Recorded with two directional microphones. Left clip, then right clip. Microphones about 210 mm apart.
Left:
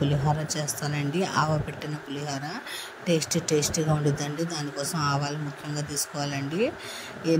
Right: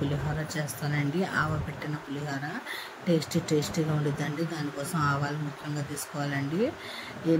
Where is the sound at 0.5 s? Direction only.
25° left (ahead or behind).